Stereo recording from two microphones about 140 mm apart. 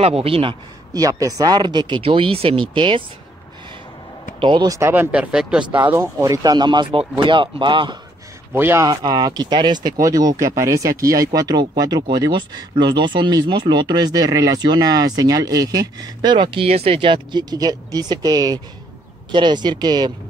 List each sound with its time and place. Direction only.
0.0 s a man's voice: 45° right (ahead or behind)
0.9 s speech: 25° right (ahead or behind)
4.4 s speech: 35° right (ahead or behind)
4.7 s speech: 20° right (ahead or behind)
5.1 s speech: 5° right (ahead or behind)
5.9 s speech: 20° right (ahead or behind)
8.5 s speech: 15° right (ahead or behind)
8.8 s speech: 30° right (ahead or behind)